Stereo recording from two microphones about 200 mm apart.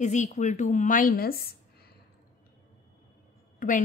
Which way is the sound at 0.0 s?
35° left (ahead or behind).